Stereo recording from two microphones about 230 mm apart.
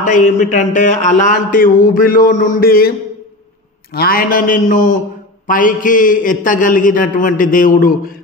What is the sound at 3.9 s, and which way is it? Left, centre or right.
A man's voice, left.